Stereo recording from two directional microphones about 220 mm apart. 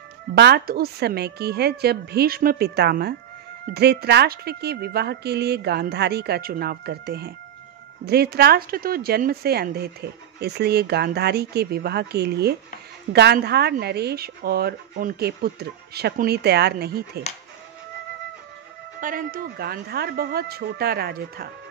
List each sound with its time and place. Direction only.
0.3 s speech: 45° right (ahead or behind)
18.9 s speech: 40° right (ahead or behind)